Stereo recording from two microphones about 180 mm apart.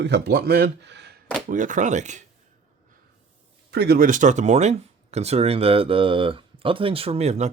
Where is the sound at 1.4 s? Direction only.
45° right (ahead or behind).